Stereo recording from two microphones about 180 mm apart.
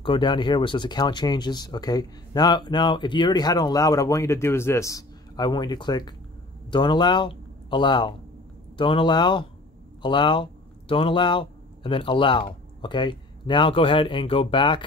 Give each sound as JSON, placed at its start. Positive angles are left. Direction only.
{"t": 0.0, "sound": "speech", "side_deg": 25}